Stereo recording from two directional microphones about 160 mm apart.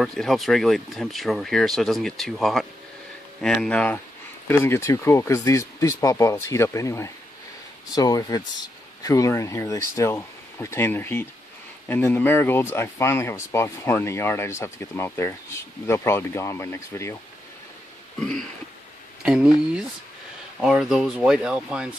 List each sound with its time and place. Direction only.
0.0 s speech: centre (ahead or behind); by 17.2 s 15° left (ahead or behind)
19.2 s speech: 5° right (ahead or behind)